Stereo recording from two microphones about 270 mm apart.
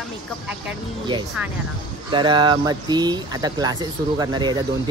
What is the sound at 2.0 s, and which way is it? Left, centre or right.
Speech, centre.